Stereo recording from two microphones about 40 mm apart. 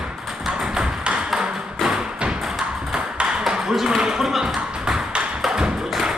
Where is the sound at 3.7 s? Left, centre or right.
Centre.